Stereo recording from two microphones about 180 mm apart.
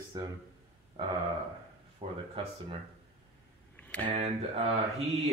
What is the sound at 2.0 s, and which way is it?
Speech, 35° right (ahead or behind).